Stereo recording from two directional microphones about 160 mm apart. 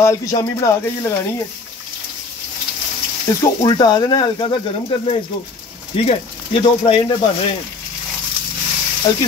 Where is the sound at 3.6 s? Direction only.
25° left (ahead or behind).